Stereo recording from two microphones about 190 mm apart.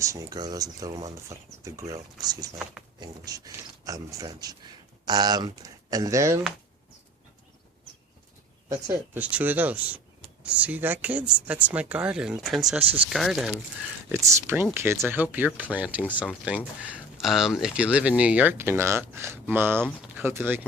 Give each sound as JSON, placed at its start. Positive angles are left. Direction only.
{"t": 0.0, "sound": "speech", "side_deg": -15}
{"t": 8.7, "sound": "speech", "side_deg": -15}
{"t": 14.1, "sound": "speech", "side_deg": -15}